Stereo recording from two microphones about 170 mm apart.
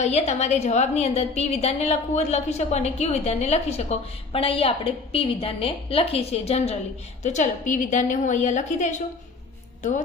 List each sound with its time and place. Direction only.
0.0 s a woman's voice: 40° left (ahead or behind)